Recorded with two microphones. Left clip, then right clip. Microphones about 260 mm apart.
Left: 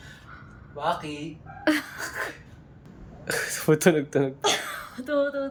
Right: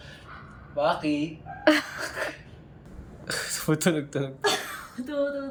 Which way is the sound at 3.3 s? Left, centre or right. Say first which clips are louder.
Left 5 dB; centre.